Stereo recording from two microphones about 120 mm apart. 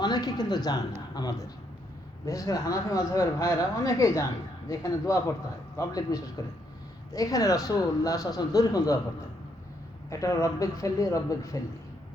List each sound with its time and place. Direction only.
0.0 s speech: 35° left (ahead or behind)
10.1 s speech: 25° left (ahead or behind)